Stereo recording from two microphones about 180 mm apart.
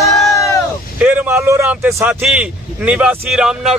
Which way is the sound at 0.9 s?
10° right (ahead or behind).